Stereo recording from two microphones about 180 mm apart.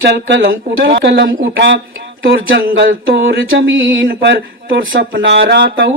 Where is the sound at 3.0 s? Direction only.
90° right.